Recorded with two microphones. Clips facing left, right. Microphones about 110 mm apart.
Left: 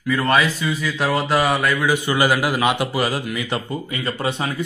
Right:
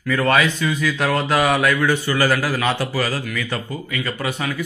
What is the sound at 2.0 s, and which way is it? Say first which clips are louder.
A man's voice: left 1 dB; 20° left (ahead or behind).